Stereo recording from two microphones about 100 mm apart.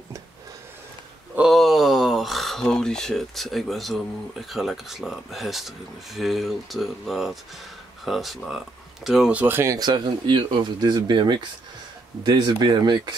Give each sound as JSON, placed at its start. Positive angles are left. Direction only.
{"t": 1.5, "sound": "speech", "side_deg": 0}
{"t": 9.3, "sound": "speech", "side_deg": -20}
{"t": 9.8, "sound": "speech", "side_deg": -50}